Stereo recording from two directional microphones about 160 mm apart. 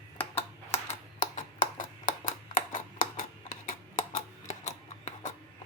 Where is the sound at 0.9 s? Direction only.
55° left (ahead or behind).